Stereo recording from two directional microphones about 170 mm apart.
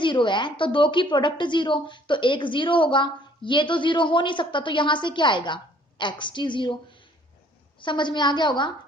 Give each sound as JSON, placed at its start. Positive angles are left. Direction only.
{"t": 0.0, "sound": "a woman's voice", "side_deg": 30}